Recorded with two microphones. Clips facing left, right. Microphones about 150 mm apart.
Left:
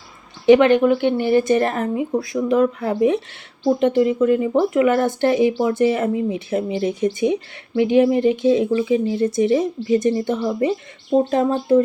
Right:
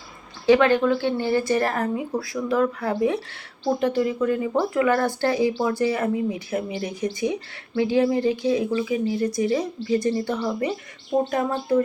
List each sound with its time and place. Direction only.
0.4 s a woman's voice: 20° left (ahead or behind)